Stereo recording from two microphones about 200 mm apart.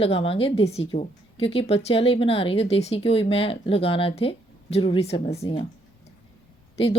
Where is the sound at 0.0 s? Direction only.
30° left (ahead or behind).